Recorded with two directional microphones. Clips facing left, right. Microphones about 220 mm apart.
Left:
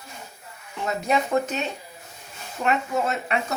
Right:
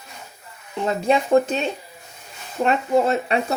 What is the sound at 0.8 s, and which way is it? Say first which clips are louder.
Speech: right 4 dB; 30° right (ahead or behind).